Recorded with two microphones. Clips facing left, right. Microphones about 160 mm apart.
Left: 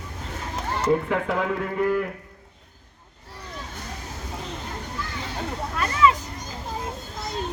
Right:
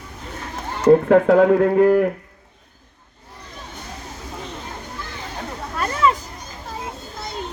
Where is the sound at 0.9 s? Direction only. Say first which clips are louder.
Right 11 dB; 50° right (ahead or behind).